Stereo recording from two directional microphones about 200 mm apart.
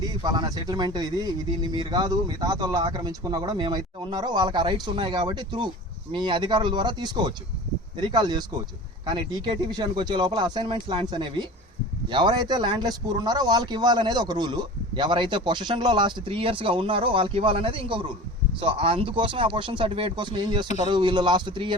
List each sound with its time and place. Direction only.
0.0 s speech: 20° right (ahead or behind)